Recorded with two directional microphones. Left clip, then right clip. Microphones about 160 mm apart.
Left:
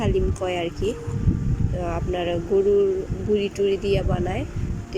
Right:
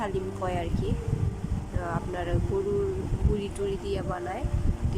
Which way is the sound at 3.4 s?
15° left (ahead or behind).